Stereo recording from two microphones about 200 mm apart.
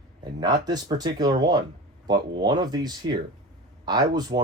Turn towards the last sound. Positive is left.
turn(degrees=-20)  # may be behind; listen again after turning